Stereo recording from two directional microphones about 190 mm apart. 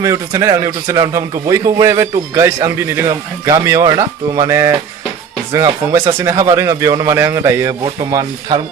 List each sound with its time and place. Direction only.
0.0 s a man's voice: 15° right (ahead or behind)